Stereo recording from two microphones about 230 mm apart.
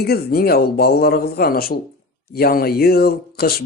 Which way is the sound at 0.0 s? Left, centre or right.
Left.